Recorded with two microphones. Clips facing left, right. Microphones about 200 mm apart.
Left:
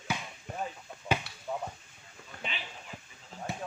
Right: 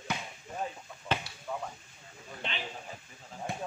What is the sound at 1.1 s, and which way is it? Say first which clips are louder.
Chop: left 2 dB; 10° left (ahead or behind).